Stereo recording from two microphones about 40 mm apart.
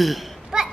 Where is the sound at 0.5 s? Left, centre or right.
Centre.